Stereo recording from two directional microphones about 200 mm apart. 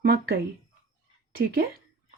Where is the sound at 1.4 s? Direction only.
50° right (ahead or behind).